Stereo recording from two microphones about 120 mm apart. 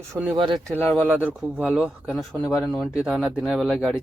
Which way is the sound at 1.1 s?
10° right (ahead or behind).